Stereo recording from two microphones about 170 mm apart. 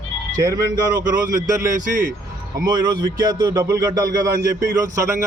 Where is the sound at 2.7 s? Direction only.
25° right (ahead or behind).